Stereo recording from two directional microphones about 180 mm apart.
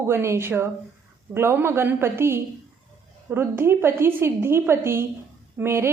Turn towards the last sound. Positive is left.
turn(degrees=-15)  # may be behind; listen again after turning